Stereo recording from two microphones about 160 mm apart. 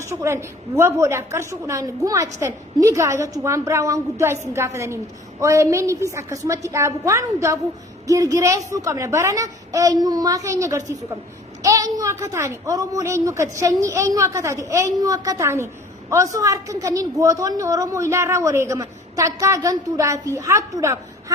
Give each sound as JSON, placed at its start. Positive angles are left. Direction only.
{"t": 0.0, "sound": "a woman's voice", "side_deg": -20}